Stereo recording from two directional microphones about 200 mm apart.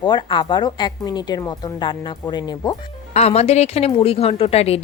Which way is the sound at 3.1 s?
30° left (ahead or behind).